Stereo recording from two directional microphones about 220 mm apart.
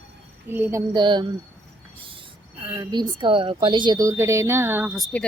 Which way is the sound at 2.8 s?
20° right (ahead or behind).